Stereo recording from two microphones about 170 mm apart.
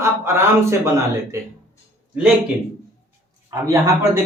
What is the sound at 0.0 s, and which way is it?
Speech, 15° right (ahead or behind).